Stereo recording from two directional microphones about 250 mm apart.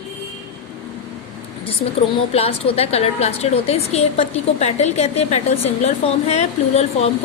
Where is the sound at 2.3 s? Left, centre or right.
Left.